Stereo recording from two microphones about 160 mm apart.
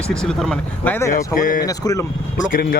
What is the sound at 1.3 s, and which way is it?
Speech, 60° left (ahead or behind).